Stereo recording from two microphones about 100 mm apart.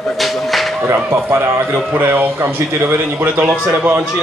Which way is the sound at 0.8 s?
25° right (ahead or behind).